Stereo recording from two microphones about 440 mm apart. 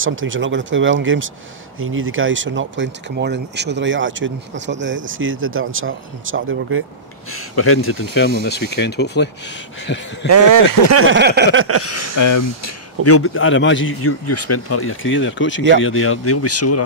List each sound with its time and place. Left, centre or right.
0.0 s speech: right
7.3 s speech: left
10.2 s speech: right
11.0 s speech: right
12.2 s speech: left
13.0 s speech: left